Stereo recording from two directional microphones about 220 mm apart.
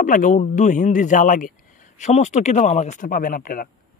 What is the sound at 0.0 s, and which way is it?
Speech, 35° left (ahead or behind).